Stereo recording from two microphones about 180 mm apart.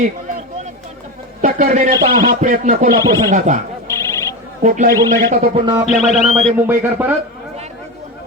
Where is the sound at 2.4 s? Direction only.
45° right (ahead or behind).